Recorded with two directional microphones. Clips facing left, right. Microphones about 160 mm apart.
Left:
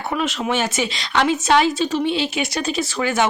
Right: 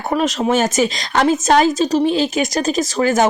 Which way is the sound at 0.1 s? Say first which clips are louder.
Right 6 dB; 40° right (ahead or behind).